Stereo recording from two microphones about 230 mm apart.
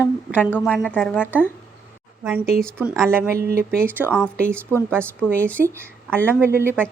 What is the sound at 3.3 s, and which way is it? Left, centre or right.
Speech, right.